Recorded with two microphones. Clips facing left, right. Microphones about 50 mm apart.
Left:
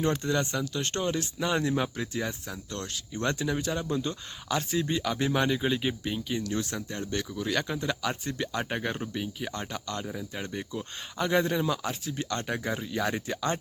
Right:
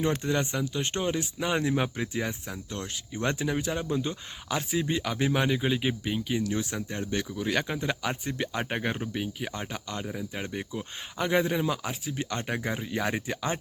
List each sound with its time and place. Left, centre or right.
0.0 s speech: centre